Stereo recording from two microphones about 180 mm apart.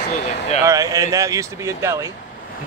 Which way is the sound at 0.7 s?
20° right (ahead or behind).